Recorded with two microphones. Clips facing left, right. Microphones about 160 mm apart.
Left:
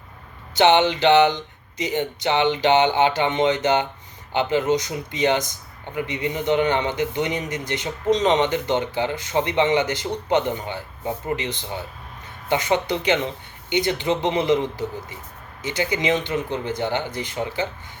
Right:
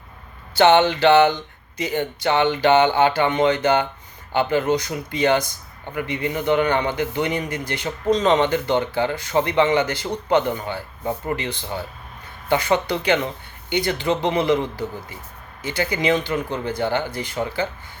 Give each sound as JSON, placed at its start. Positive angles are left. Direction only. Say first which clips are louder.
{"t": 0.5, "sound": "speech", "louder": "right 2 dB", "side_deg": 20}